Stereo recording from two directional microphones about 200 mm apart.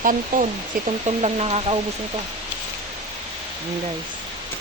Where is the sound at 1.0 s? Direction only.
30° right (ahead or behind).